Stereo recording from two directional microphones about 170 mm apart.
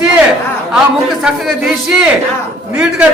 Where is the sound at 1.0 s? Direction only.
Centre (ahead or behind).